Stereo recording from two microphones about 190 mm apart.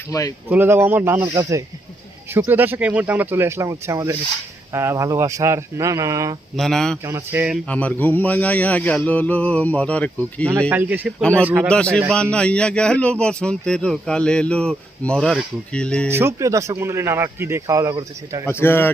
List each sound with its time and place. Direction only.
0.1 s speech: 20° left (ahead or behind)
0.5 s speech: 10° right (ahead or behind)
6.6 s a man's voice: centre (ahead or behind)
7.0 s speech: 15° right (ahead or behind)
7.7 s speech: 10° left (ahead or behind)
10.7 s speech: 10° right (ahead or behind)
11.2 s speech: 5° left (ahead or behind)
11.4 s speech: 10° right (ahead or behind)
11.7 s a man's voice: 5° left (ahead or behind)
16.0 s speech: 15° right (ahead or behind)
18.4 s speech: 10° left (ahead or behind)